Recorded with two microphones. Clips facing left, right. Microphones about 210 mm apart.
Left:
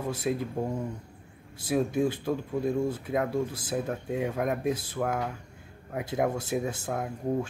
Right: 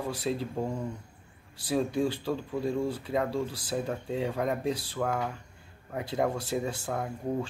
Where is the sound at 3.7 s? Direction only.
5° left (ahead or behind).